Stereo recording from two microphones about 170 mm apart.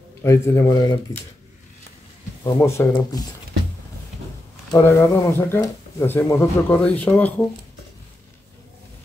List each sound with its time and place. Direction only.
0.2 s speech: 15° left (ahead or behind)
2.4 s speech: 20° left (ahead or behind)
4.6 s speech: 15° left (ahead or behind)
6.7 s speech: 5° left (ahead or behind)